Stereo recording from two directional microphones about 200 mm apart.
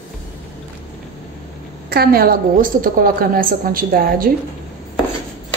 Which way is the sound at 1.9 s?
50° right (ahead or behind).